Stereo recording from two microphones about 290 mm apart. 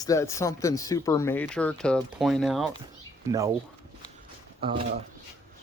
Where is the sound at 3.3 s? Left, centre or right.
Centre.